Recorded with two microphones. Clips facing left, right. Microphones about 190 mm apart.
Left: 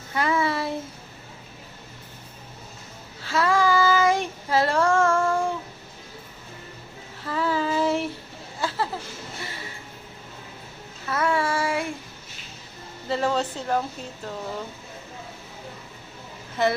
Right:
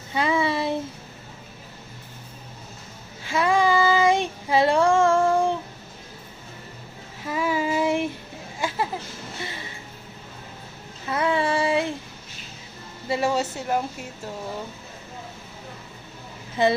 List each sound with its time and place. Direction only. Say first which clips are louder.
0.1 s child singing: right 1 dB; 20° right (ahead or behind)
3.2 s child singing: right 1 dB; 15° right (ahead or behind)
7.3 s child singing: right 1 dB; 15° right (ahead or behind)
8.5 s a sound: right 1 dB; 15° right (ahead or behind)
11.0 s child singing: right 1 dB; 20° right (ahead or behind)
13.1 s speech: right 1 dB; 10° right (ahead or behind)